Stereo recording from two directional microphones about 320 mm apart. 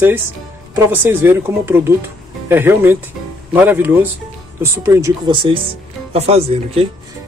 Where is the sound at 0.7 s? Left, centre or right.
Centre.